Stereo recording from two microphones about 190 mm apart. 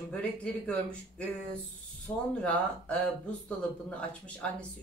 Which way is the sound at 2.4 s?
5° left (ahead or behind).